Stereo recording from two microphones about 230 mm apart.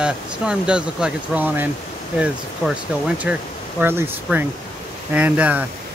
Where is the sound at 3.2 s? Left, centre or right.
Centre.